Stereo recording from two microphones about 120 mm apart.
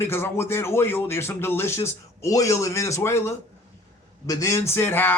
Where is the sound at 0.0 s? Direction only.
20° left (ahead or behind).